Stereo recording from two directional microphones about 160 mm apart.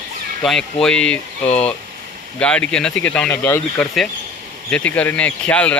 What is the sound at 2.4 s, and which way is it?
Speech, 5° left (ahead or behind).